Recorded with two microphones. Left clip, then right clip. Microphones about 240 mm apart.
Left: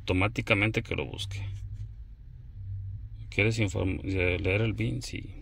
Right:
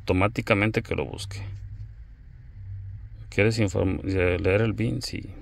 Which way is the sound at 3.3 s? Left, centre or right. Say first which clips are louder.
Right 4 dB; right.